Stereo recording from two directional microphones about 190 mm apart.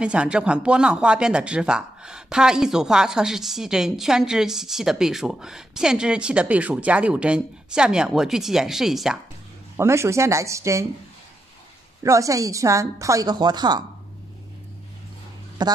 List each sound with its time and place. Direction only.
0.0 s speech: 5° right (ahead or behind)
9.8 s a woman's voice: 15° right (ahead or behind)
12.0 s a woman's voice: 15° right (ahead or behind)
15.6 s a man's voice: 20° right (ahead or behind)